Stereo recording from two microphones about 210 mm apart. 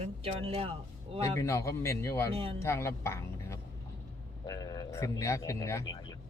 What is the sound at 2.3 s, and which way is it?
Speech, 25° right (ahead or behind).